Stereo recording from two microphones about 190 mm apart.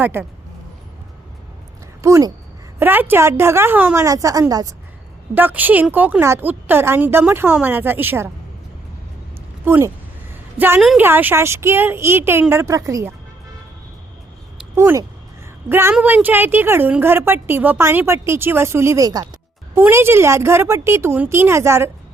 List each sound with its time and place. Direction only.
0.0 s a woman's voice: 10° right (ahead or behind)
2.0 s a woman's voice: 15° right (ahead or behind)
9.6 s a woman's voice: 15° right (ahead or behind)
14.8 s a woman's voice: 15° right (ahead or behind)